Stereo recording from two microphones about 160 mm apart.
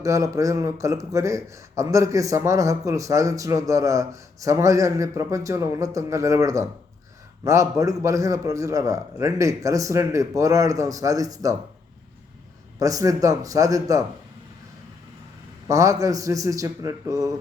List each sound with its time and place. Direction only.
0.0 s a man's voice: 20° right (ahead or behind)
12.8 s a man's voice: 20° right (ahead or behind)
15.6 s a man's voice: 20° right (ahead or behind)